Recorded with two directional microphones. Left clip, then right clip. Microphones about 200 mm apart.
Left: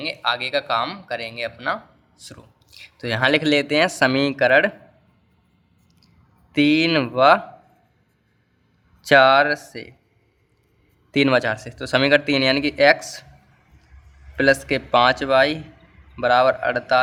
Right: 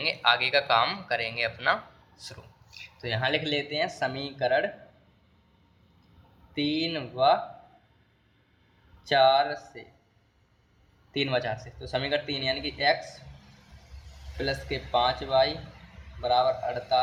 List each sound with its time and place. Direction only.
0.0 s speech: 25° left (ahead or behind); by 4.7 s 45° left (ahead or behind)
6.5 s speech: 45° left (ahead or behind)
9.0 s speech: 45° left (ahead or behind)
11.1 s speech: 50° left (ahead or behind)
14.3 s speech: 45° left (ahead or behind)